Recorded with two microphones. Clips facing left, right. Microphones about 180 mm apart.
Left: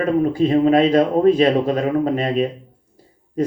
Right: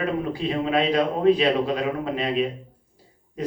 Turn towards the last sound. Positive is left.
turn(degrees=45)  # may be behind; listen again after turning